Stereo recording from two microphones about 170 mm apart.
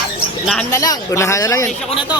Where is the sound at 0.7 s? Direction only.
20° left (ahead or behind).